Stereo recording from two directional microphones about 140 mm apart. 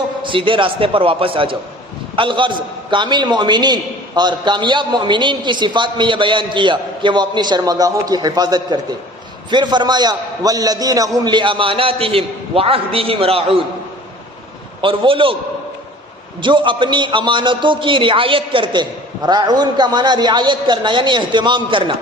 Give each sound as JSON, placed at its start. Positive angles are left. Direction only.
{"t": 0.2, "sound": "a man's voice", "side_deg": -35}
{"t": 14.8, "sound": "a man's voice", "side_deg": -40}
{"t": 16.4, "sound": "a man's voice", "side_deg": -35}